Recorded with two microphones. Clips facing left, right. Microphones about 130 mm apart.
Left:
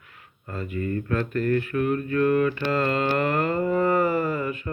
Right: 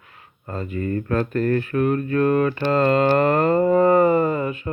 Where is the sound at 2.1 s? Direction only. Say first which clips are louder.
Right 1 dB; 35° right (ahead or behind).